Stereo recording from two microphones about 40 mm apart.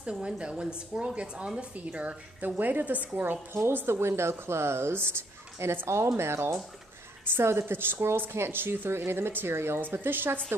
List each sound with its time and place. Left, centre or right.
0.0 s a woman's voice: right
3.8 s a woman's voice: right
7.3 s a woman's voice: right